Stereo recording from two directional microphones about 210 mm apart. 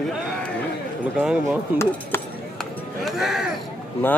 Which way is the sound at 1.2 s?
5° right (ahead or behind).